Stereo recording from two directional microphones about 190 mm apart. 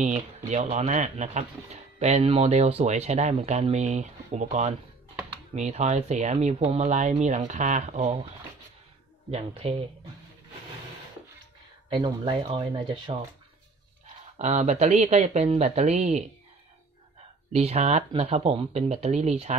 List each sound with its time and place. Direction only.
0.0 s speech: 40° right (ahead or behind)
9.3 s speech: 30° right (ahead or behind)
11.9 s speech: 25° right (ahead or behind)
14.3 s speech: 35° right (ahead or behind)
17.5 s speech: 35° right (ahead or behind)